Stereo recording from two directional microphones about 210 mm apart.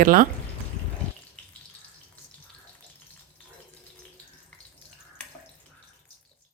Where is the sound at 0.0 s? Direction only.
40° right (ahead or behind).